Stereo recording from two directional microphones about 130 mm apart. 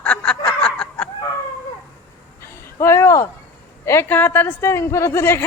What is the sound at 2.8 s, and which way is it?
A woman's voice, 20° left (ahead or behind).